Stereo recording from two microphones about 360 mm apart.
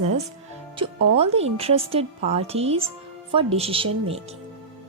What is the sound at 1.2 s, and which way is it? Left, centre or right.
Speech, centre.